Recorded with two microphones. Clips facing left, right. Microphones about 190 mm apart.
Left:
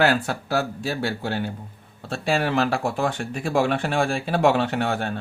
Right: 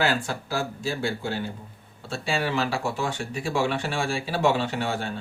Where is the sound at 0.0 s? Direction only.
60° left (ahead or behind).